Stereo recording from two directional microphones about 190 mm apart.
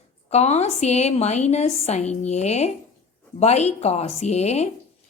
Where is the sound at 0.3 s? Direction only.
35° left (ahead or behind).